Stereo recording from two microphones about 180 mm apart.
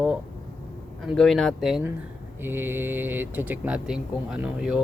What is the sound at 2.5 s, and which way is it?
Speech, 10° right (ahead or behind).